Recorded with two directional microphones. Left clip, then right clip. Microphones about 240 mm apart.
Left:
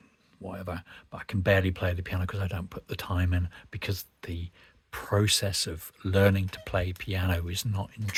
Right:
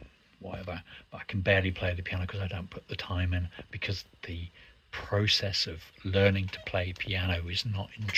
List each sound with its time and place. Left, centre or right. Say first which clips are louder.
0.4 s speech: left 2 dB; left